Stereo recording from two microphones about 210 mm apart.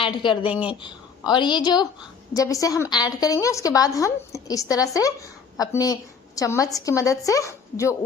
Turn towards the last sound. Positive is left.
turn(degrees=15)  # may be behind; listen again after turning